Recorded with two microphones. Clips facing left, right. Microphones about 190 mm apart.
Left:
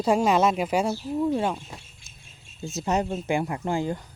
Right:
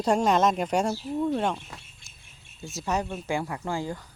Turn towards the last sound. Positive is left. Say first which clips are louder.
# left 4 dB
turn(degrees=20)  # may be behind; listen again after turning